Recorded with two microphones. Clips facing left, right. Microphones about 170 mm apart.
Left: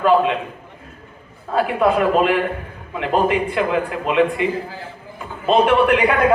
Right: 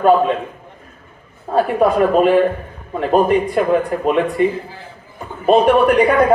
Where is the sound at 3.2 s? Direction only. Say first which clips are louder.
Right 4 dB; 45° right (ahead or behind).